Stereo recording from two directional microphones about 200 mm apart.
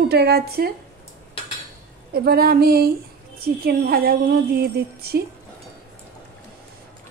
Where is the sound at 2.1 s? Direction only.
50° right (ahead or behind).